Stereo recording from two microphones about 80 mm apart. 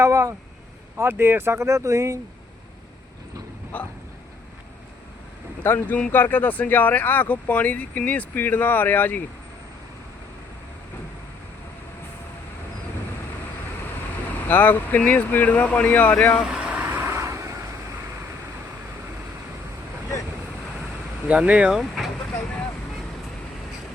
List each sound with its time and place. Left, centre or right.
0.0 s speech: right
0.9 s speech: right
3.7 s speech: left
5.6 s speech: left
14.4 s speech: left
16.5 s vehicle: centre; by 17.5 s right
21.2 s speech: centre
21.8 s speech: centre